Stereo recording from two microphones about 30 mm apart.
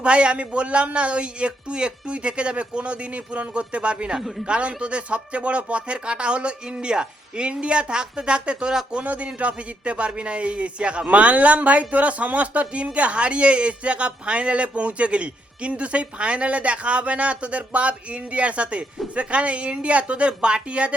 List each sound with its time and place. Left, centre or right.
0.0 s speech: right
4.2 s speech: centre
4.4 s speech: right
9.0 s speech: right